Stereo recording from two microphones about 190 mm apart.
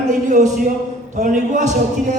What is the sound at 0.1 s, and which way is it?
A man's voice, 40° right (ahead or behind).